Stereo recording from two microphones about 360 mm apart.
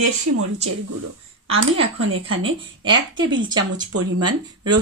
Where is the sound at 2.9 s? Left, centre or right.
Right.